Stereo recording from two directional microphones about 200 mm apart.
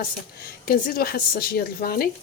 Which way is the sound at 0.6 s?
45° left (ahead or behind).